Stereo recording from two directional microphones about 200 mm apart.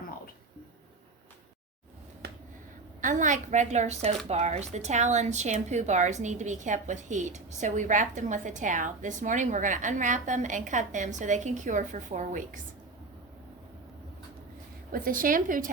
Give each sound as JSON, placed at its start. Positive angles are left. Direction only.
{"t": 2.2, "sound": "finger snapping", "side_deg": -55}
{"t": 3.0, "sound": "speech", "side_deg": -40}
{"t": 14.9, "sound": "a woman's voice", "side_deg": -45}